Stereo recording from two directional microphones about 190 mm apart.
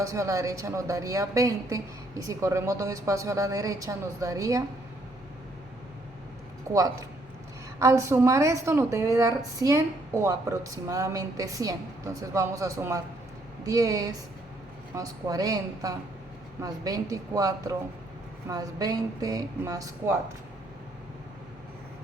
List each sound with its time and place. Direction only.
0.0 s a woman's voice: 15° right (ahead or behind)
6.7 s a woman's voice: 15° right (ahead or behind)